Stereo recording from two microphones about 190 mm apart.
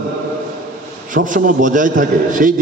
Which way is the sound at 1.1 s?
45° right (ahead or behind).